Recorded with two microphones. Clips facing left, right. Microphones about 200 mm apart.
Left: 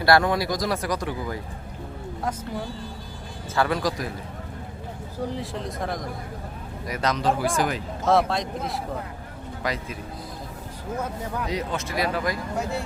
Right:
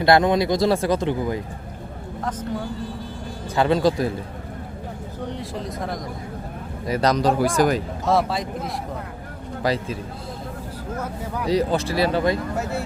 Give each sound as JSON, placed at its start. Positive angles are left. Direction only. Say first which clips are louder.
{"t": 0.0, "sound": "speech", "louder": "right 3 dB", "side_deg": -20}
{"t": 3.5, "sound": "speech", "louder": "right 5 dB", "side_deg": -25}
{"t": 5.3, "sound": "speech", "louder": "right 1 dB", "side_deg": 0}
{"t": 6.8, "sound": "speech", "louder": "right 5 dB", "side_deg": -35}
{"t": 8.0, "sound": "speech", "louder": "left 1 dB", "side_deg": 0}
{"t": 9.6, "sound": "speech", "louder": "right 7 dB", "side_deg": -30}
{"t": 11.4, "sound": "speech", "louder": "right 12 dB", "side_deg": -35}
{"t": 12.5, "sound": "speech", "louder": "right 2 dB", "side_deg": -5}